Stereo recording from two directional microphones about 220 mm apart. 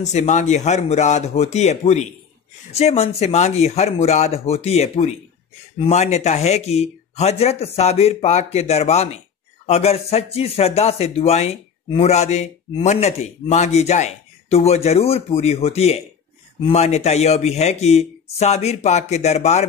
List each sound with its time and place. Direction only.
0.0 s a man's voice: 30° left (ahead or behind)